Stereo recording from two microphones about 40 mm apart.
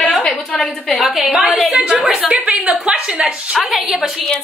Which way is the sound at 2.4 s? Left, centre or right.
Right.